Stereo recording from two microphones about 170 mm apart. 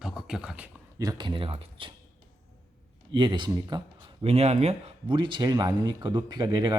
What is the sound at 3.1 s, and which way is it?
A man's voice, 25° right (ahead or behind).